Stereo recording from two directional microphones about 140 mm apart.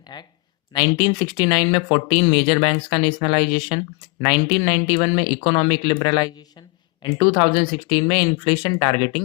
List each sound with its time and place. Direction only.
0.1 s speech: 30° left (ahead or behind)